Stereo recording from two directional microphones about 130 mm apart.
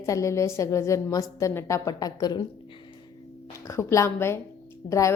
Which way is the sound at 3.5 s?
25° left (ahead or behind).